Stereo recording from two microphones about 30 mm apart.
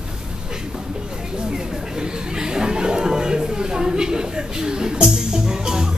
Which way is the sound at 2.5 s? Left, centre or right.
Right.